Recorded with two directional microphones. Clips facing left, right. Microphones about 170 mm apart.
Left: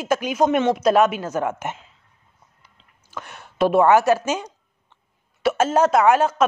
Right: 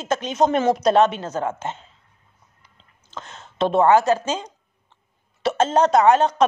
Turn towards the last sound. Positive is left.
turn(degrees=5)  # may be behind; listen again after turning